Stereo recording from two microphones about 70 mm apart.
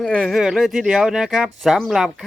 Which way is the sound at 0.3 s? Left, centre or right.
Centre.